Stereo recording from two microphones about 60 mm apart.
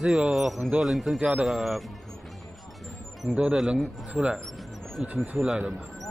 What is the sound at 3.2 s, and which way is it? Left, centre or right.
Speech, right.